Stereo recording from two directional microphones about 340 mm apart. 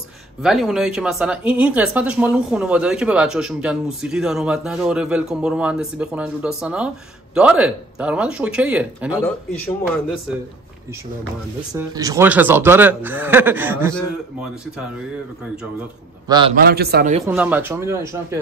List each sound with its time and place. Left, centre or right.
0.4 s speech: centre
11.7 s speech: centre
16.3 s a man's voice: centre
16.5 s a man's voice: right
17.2 s speech: centre